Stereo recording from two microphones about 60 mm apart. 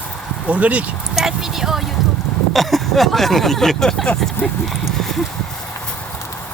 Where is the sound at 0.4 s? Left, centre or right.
Right.